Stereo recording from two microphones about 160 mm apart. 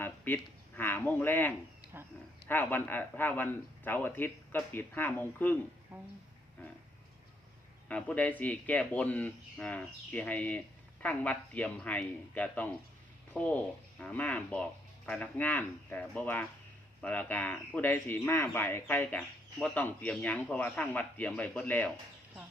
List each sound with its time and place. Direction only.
0.3 s speech: 15° left (ahead or behind)
1.9 s speech: 10° right (ahead or behind)
2.5 s speech: 10° left (ahead or behind)
5.9 s speech: 15° right (ahead or behind)
7.9 s speech: 10° left (ahead or behind)